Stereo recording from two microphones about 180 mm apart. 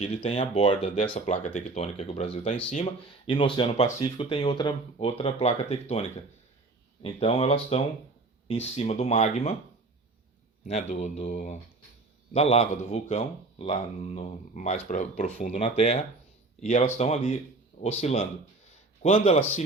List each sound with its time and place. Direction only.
0.0 s speech: 35° left (ahead or behind)
1.3 s speech: 40° left (ahead or behind)
10.7 s speech: 40° left (ahead or behind)